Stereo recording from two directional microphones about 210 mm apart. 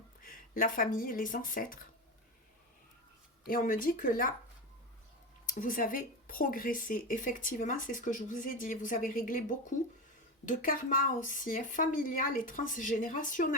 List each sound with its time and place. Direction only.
0.2 s speech: 40° left (ahead or behind)
3.4 s speech: 40° left (ahead or behind)
5.5 s speech: 40° left (ahead or behind)